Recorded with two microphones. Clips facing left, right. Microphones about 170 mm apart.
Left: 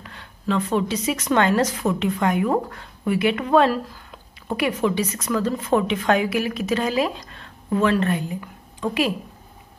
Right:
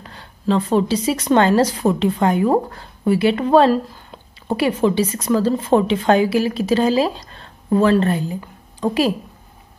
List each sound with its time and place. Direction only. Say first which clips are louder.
0.0 s a woman's voice: right 5 dB; 35° right (ahead or behind)